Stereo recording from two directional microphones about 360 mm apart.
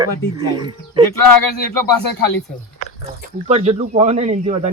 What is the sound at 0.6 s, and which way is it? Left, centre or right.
Speech, centre.